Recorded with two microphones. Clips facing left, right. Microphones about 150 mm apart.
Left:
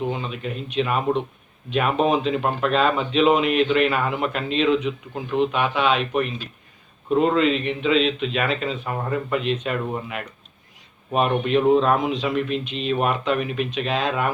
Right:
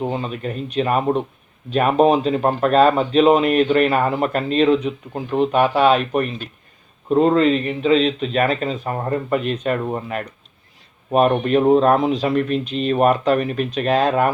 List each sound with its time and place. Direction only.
0.0 s a man's voice: 40° right (ahead or behind)